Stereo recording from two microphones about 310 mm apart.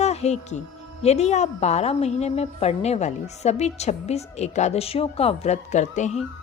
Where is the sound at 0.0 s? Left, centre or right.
Left.